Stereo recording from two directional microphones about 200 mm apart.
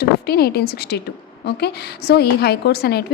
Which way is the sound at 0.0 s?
50° left (ahead or behind).